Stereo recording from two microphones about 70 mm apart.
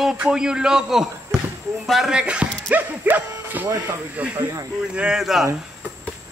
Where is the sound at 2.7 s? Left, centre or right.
Right.